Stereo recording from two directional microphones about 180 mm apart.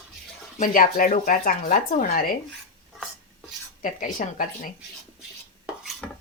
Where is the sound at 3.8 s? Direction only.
45° left (ahead or behind).